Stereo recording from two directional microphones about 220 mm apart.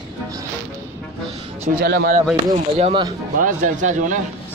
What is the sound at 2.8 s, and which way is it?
A man's voice, 30° right (ahead or behind).